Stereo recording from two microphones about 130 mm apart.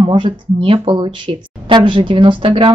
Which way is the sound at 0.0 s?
40° right (ahead or behind).